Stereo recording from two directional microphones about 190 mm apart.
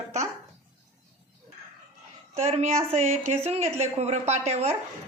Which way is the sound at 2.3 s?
35° right (ahead or behind).